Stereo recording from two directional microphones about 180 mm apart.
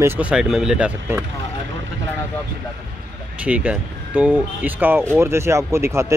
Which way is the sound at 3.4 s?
5° right (ahead or behind).